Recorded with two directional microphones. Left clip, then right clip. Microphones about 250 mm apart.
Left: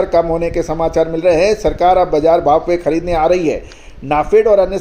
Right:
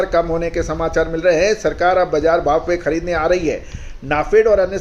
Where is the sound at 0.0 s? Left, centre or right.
Centre.